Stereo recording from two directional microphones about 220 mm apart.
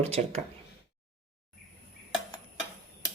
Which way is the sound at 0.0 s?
30° right (ahead or behind).